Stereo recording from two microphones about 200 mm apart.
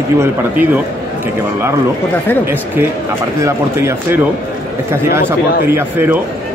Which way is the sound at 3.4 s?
15° right (ahead or behind).